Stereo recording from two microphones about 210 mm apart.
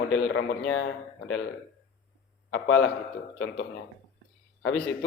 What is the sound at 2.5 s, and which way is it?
A man's voice, 65° left (ahead or behind).